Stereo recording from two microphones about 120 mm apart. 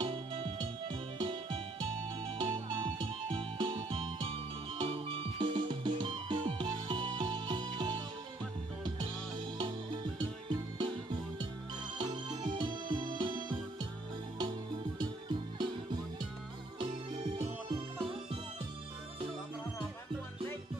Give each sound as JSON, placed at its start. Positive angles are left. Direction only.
{"t": 0.0, "sound": "music", "side_deg": -45}
{"t": 10.1, "sound": "music", "side_deg": -40}
{"t": 12.0, "sound": "music", "side_deg": -40}
{"t": 15.0, "sound": "music", "side_deg": -40}
{"t": 17.6, "sound": "music", "side_deg": -45}